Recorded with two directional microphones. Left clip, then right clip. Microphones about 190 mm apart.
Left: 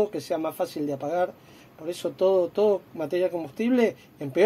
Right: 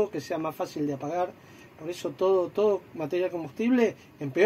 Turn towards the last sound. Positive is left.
turn(degrees=5)  # may be behind; listen again after turning